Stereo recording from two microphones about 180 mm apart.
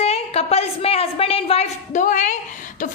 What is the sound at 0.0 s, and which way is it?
A woman's voice, 35° left (ahead or behind).